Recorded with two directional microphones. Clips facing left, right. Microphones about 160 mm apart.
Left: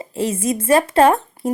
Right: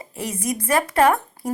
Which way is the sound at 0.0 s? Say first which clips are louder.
Left 7 dB; 25° left (ahead or behind).